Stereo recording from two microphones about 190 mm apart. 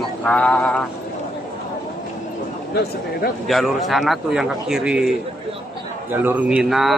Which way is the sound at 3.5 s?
Centre (ahead or behind).